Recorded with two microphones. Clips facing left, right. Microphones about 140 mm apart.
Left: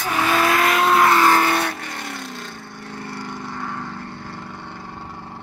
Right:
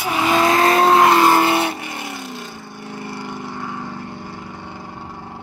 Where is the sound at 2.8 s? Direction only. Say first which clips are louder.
Right 2 dB; 15° right (ahead or behind).